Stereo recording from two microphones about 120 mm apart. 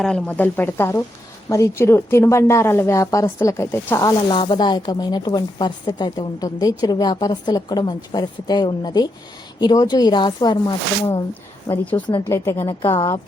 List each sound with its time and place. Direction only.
0.0 s a woman's voice: 10° left (ahead or behind)
4.3 s speech: 40° left (ahead or behind)
11.7 s a woman's voice: 15° left (ahead or behind)